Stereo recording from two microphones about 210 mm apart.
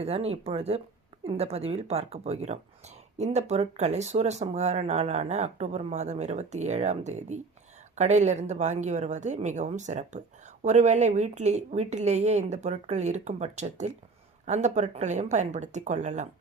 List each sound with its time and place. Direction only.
0.0 s speech: 30° right (ahead or behind)